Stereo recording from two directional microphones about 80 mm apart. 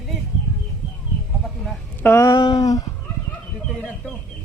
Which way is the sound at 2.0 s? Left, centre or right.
Left.